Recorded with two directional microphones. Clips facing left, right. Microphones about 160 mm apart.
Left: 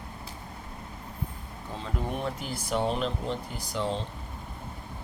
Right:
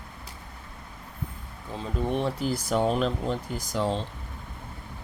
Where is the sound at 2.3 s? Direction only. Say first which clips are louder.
Right 4 dB; 40° right (ahead or behind).